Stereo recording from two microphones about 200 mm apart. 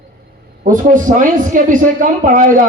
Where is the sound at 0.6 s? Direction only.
40° right (ahead or behind).